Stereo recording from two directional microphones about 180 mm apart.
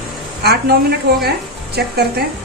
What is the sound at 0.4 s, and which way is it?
Speech, 60° right (ahead or behind).